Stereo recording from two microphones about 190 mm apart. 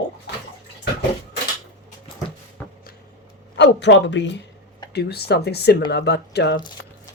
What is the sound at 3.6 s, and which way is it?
Speech, 70° left (ahead or behind).